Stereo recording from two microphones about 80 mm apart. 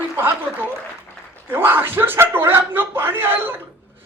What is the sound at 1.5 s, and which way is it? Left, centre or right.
Speech, right.